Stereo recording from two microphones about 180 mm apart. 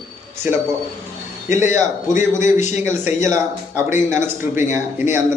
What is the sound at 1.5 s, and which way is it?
Speech, 15° right (ahead or behind).